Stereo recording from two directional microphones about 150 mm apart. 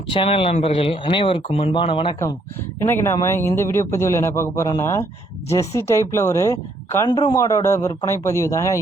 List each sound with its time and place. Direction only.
0.1 s speech: 35° left (ahead or behind)
2.8 s a man's voice: 15° left (ahead or behind)